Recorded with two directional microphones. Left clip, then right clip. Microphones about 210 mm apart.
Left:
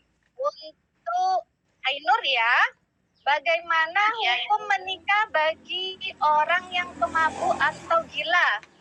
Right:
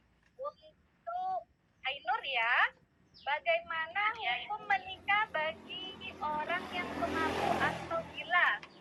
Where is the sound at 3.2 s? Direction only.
45° left (ahead or behind).